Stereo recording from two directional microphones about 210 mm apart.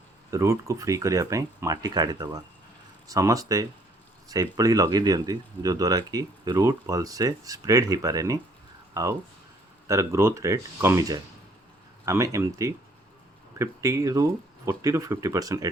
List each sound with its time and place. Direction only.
0.3 s speech: 15° right (ahead or behind)